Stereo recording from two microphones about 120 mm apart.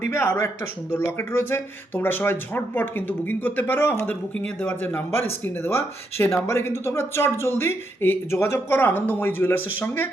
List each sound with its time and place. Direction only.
0.1 s speech: 20° left (ahead or behind)